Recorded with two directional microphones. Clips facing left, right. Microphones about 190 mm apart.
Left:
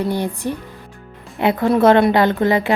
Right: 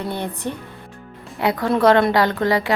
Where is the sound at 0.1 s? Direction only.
10° left (ahead or behind).